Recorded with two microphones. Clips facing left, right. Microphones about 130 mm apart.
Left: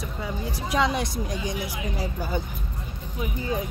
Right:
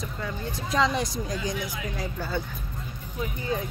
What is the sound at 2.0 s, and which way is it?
Speech, 15° left (ahead or behind).